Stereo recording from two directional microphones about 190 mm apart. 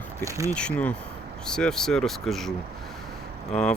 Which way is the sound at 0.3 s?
15° right (ahead or behind).